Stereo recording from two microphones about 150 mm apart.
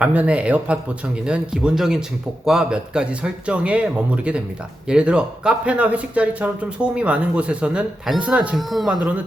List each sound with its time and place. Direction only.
0.0 s a man's voice: 10° right (ahead or behind)